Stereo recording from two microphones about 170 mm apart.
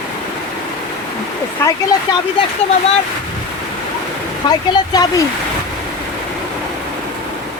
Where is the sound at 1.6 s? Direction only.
15° left (ahead or behind).